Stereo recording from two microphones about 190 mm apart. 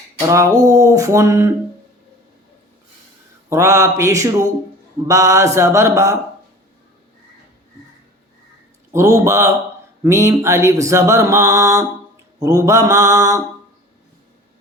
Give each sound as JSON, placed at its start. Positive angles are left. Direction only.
{"t": 0.2, "sound": "mantra", "side_deg": -15}
{"t": 3.5, "sound": "mantra", "side_deg": -15}
{"t": 8.9, "sound": "mantra", "side_deg": -15}